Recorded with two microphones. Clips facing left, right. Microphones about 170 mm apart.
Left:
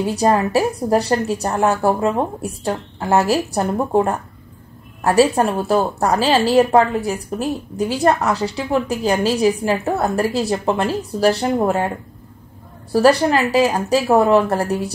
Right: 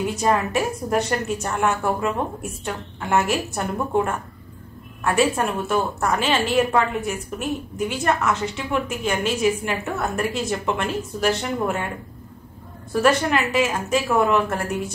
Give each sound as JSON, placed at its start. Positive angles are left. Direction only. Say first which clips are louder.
{"t": 0.0, "sound": "a woman's voice", "louder": "left 5 dB", "side_deg": 35}
{"t": 12.9, "sound": "a woman's voice", "louder": "left 5 dB", "side_deg": 35}